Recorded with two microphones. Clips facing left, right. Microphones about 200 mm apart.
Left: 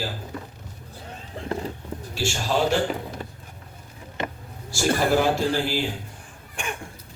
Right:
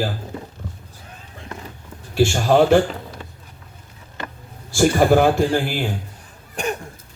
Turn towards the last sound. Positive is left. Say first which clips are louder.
# right 8 dB
turn(degrees=-40)  # may be behind; listen again after turning